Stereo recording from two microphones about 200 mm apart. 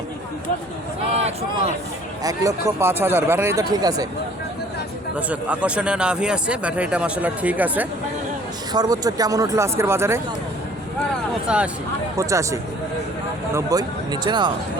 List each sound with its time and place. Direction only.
2.2 s speech: 15° right (ahead or behind)
5.3 s speech: 5° right (ahead or behind)
8.7 s speech: 20° right (ahead or behind)
11.4 s speech: 5° right (ahead or behind); by 14.5 s 20° right (ahead or behind)